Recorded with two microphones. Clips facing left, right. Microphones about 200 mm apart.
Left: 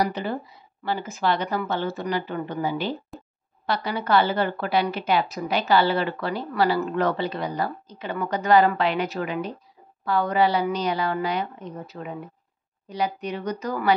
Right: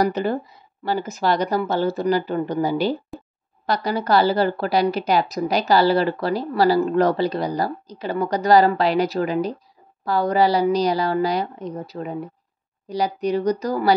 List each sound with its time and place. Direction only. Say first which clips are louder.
0.0 s a woman's voice: right 5 dB; 45° right (ahead or behind)